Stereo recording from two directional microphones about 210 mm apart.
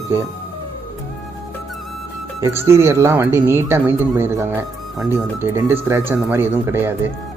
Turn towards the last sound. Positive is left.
turn(degrees=-10)  # may be behind; listen again after turning